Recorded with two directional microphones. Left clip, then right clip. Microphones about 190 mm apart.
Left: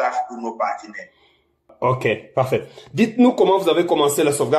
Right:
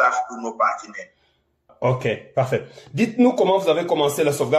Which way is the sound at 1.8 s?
30° left (ahead or behind).